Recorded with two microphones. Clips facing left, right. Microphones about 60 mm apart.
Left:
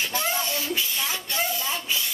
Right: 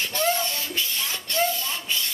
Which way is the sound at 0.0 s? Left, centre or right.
Centre.